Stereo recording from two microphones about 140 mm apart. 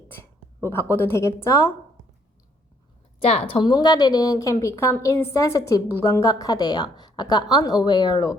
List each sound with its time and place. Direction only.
0.1 s a woman's voice: 15° left (ahead or behind)
3.2 s a woman's voice: 45° left (ahead or behind)